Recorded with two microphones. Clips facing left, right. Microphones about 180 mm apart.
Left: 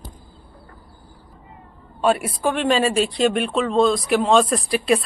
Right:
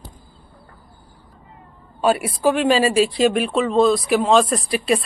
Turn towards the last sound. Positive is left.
turn(degrees=0)  # may be behind; listen again after turning